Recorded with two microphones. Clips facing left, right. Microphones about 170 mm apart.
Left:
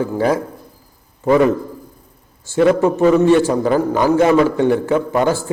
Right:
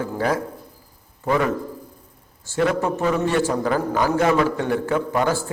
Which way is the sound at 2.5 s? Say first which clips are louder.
Left 7 dB; 20° left (ahead or behind).